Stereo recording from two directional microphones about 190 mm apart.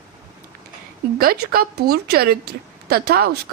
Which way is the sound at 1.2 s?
50° right (ahead or behind).